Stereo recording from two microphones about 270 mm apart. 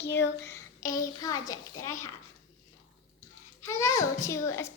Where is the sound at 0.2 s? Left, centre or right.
Centre.